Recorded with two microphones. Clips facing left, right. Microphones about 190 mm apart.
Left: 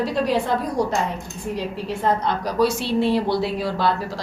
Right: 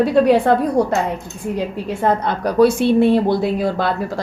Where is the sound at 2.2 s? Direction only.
55° right (ahead or behind).